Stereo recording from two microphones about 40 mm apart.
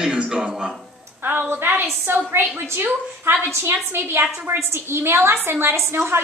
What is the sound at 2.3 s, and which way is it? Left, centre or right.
A woman's voice, right.